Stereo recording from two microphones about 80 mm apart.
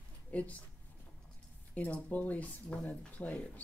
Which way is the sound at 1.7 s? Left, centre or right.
Centre.